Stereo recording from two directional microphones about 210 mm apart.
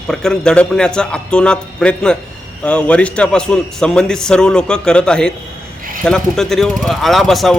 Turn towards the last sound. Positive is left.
turn(degrees=0)  # may be behind; listen again after turning